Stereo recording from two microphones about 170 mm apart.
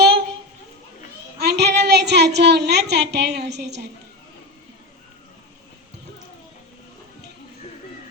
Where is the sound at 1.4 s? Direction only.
75° right (ahead or behind).